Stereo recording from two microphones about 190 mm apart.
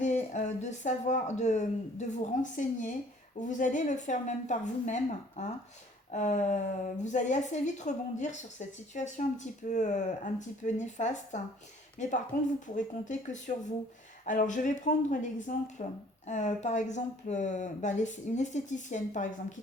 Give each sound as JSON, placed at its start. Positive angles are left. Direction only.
{"t": 0.0, "sound": "a woman's voice", "side_deg": 40}